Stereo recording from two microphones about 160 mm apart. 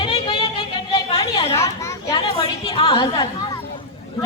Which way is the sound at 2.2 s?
35° left (ahead or behind).